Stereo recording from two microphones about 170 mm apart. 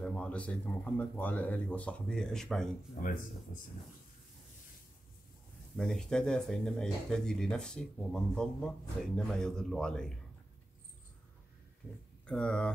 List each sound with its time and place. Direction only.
0.0 s speech: 5° left (ahead or behind)
3.0 s speech: 50° left (ahead or behind)
5.8 s speech: 5° left (ahead or behind)
12.3 s speech: 5° left (ahead or behind)